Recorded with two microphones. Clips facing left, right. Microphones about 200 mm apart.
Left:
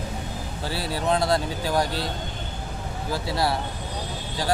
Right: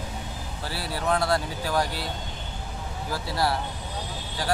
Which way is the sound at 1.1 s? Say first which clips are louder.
Left 2 dB; 20° left (ahead or behind).